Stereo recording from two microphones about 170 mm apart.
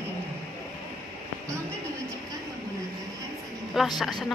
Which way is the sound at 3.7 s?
Centre (ahead or behind).